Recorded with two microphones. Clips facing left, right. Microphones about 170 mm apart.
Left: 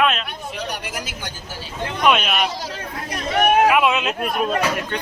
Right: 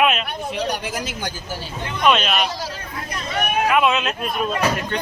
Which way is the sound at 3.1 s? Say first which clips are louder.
Left 6 dB; 75° left (ahead or behind).